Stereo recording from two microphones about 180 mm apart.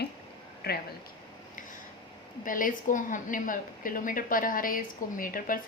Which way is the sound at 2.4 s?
50° left (ahead or behind).